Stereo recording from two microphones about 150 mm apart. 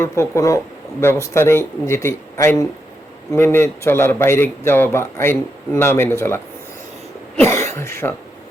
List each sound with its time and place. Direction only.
0.0 s speech: 20° left (ahead or behind)